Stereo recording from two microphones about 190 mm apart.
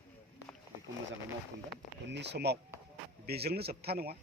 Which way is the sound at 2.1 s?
65° right (ahead or behind).